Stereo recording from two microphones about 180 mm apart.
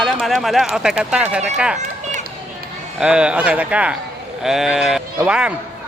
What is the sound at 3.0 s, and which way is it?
Speech, 5° right (ahead or behind).